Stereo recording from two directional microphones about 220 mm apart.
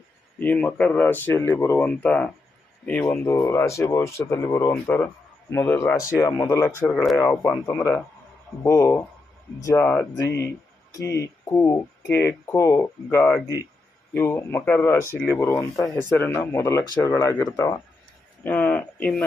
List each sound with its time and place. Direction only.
0.3 s speech: 5° left (ahead or behind)
18.4 s speech: 5° left (ahead or behind)